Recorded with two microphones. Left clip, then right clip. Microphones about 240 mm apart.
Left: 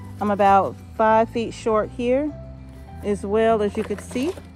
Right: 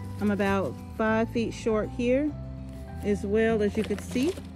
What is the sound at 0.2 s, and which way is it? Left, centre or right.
Speech, centre.